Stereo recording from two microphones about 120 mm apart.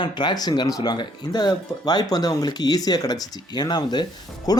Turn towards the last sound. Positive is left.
turn(degrees=35)  # may be behind; listen again after turning